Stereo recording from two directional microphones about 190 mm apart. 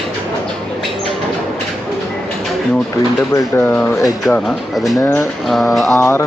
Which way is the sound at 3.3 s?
15° left (ahead or behind).